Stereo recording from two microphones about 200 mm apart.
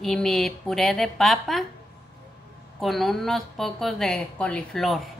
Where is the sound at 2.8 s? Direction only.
Centre (ahead or behind).